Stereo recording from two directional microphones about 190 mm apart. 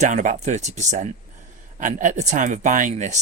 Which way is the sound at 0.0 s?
40° right (ahead or behind).